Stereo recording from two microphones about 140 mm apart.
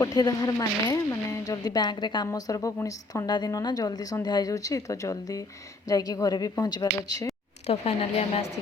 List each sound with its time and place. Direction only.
0.0 s a woman's voice: 25° left (ahead or behind)
7.7 s a woman's voice: 45° left (ahead or behind)